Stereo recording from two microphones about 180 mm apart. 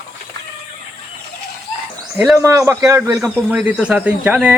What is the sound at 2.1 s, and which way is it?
A man's voice, 5° right (ahead or behind).